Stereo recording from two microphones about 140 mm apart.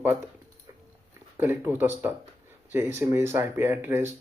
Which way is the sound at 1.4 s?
15° right (ahead or behind).